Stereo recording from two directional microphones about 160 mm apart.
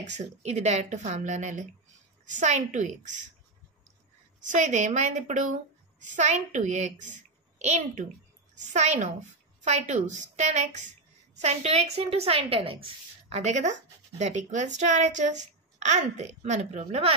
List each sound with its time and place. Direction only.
0.0 s a woman's voice: 45° right (ahead or behind)
4.4 s a woman's voice: 50° right (ahead or behind)